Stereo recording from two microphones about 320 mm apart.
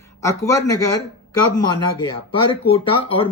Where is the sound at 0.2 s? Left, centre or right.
Centre.